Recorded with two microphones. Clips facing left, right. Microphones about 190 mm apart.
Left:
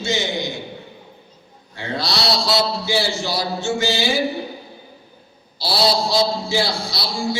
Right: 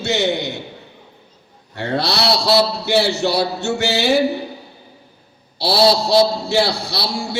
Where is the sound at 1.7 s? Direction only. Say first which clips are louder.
Right 4 dB; 65° right (ahead or behind).